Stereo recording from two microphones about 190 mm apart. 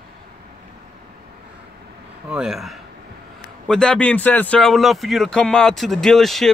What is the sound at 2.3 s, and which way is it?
Speech, 5° right (ahead or behind).